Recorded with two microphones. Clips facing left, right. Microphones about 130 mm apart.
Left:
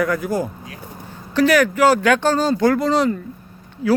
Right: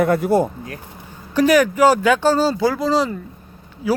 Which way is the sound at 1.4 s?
15° right (ahead or behind).